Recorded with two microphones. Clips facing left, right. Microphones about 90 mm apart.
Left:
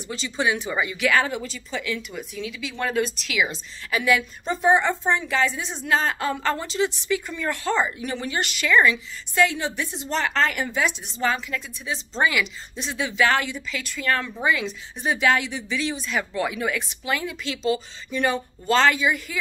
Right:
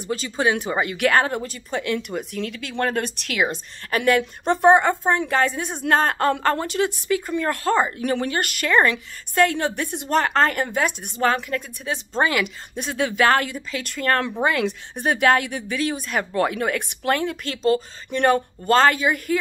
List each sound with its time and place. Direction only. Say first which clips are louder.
0.1 s speech: right 3 dB; 45° right (ahead or behind)
4.2 s a woman's voice: right 6 dB; 65° right (ahead or behind); by 19.3 s 45° right (ahead or behind)